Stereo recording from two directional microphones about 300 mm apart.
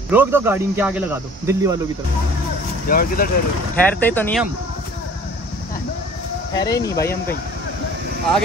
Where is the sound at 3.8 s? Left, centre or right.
Centre.